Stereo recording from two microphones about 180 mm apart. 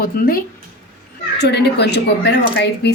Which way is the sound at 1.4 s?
70° left (ahead or behind).